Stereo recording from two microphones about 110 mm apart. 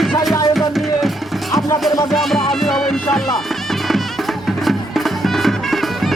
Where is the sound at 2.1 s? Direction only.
Centre (ahead or behind).